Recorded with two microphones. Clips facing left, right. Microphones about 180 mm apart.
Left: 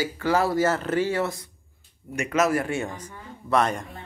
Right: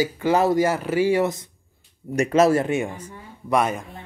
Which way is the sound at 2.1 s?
35° right (ahead or behind).